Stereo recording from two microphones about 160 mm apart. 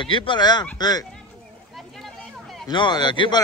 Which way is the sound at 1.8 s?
Centre (ahead or behind).